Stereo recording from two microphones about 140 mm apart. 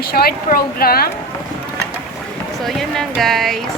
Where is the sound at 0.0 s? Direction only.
90° left.